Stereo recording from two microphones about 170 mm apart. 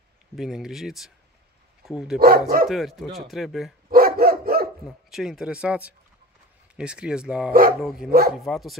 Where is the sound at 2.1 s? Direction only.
65° right (ahead or behind).